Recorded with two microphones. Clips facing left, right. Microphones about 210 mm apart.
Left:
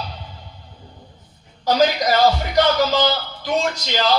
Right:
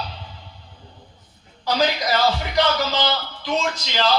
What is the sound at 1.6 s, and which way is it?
Speech, 45° left (ahead or behind).